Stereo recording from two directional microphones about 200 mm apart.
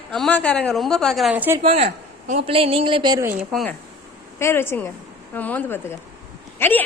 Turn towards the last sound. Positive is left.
turn(degrees=10)  # may be behind; listen again after turning